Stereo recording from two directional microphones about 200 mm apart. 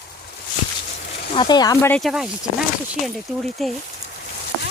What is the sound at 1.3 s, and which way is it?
Speech, 20° left (ahead or behind).